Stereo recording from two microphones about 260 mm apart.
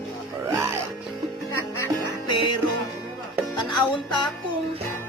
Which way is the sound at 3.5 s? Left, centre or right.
Centre.